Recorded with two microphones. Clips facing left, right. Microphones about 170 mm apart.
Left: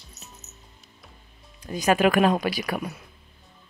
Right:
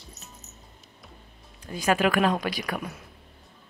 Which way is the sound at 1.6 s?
15° left (ahead or behind).